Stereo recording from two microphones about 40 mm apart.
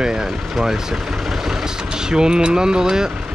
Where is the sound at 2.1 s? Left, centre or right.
Centre.